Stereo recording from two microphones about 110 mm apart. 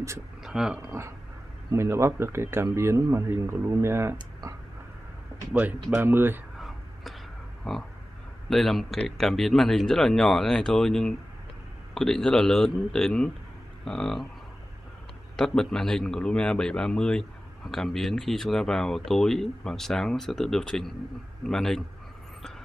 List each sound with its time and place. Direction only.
0.4 s a sound: 5° right (ahead or behind)
0.8 s speech: 25° right (ahead or behind)
5.5 s speech: 15° right (ahead or behind)
7.7 s a man's voice: 5° left (ahead or behind)
15.3 s a man's voice: 5° left (ahead or behind)